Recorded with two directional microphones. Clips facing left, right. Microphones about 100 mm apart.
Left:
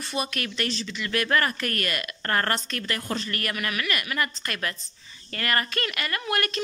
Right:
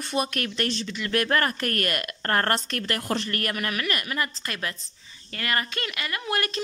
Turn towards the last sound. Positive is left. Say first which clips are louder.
# even
turn(degrees=-25)  # may be behind; listen again after turning